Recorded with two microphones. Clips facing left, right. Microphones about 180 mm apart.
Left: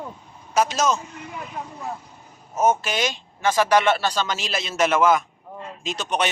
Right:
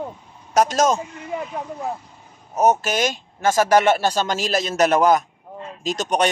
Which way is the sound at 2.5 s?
40° right (ahead or behind).